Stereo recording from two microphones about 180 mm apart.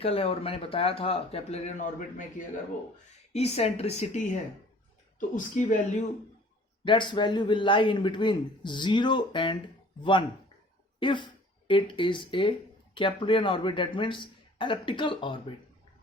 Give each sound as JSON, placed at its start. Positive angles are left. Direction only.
{"t": 0.0, "sound": "speech", "side_deg": 35}
{"t": 6.8, "sound": "speech", "side_deg": 25}